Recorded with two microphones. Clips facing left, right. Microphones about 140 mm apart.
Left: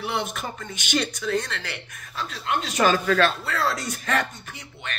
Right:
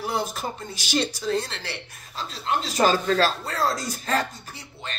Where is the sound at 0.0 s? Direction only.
35° right (ahead or behind).